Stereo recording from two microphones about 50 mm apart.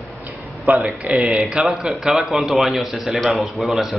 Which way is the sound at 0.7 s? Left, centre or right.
Right.